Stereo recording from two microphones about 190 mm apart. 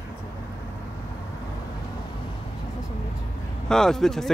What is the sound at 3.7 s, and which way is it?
Speech, centre (ahead or behind).